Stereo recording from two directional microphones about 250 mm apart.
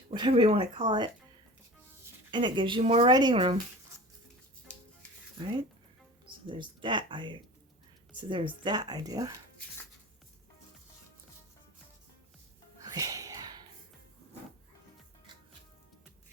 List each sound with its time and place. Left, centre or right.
0.1 s speech: centre
2.3 s speech: centre
6.5 s speech: centre
12.8 s a sound: centre